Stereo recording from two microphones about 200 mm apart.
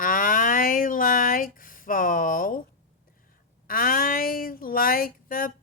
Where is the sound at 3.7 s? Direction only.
45° left (ahead or behind).